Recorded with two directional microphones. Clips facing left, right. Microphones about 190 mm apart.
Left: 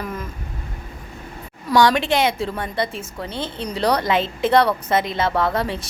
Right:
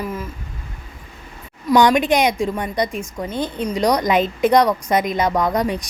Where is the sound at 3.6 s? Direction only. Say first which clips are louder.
Right 2 dB; 15° right (ahead or behind).